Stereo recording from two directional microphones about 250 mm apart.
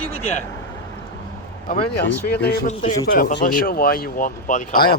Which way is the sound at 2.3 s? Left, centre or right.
Left.